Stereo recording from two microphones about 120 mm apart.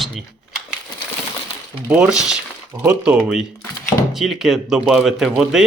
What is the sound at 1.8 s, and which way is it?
Speech, 10° right (ahead or behind).